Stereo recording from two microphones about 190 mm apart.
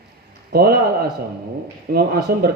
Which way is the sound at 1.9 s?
55° right (ahead or behind).